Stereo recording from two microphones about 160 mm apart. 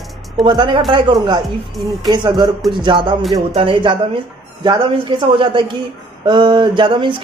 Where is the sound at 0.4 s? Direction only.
30° right (ahead or behind).